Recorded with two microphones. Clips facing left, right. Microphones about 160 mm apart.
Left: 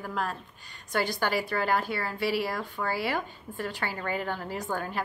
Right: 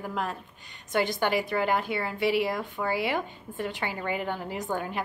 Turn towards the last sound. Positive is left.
turn(degrees=-20)  # may be behind; listen again after turning